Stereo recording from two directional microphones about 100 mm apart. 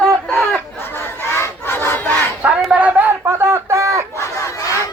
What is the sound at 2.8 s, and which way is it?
Speech, 15° right (ahead or behind).